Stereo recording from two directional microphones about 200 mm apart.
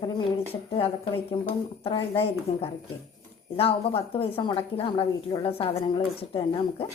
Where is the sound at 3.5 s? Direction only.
30° left (ahead or behind).